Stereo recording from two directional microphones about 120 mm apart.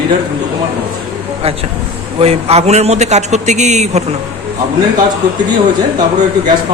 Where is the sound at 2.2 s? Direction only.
60° right (ahead or behind).